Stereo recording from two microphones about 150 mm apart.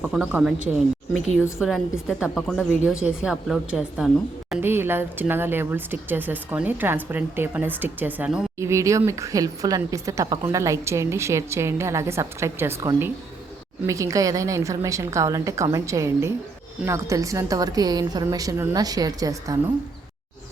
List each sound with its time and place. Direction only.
0.0 s a woman's voice: 5° right (ahead or behind)
4.6 s speech: 15° right (ahead or behind)
8.5 s speech: 20° right (ahead or behind)
13.8 s speech: 20° right (ahead or behind)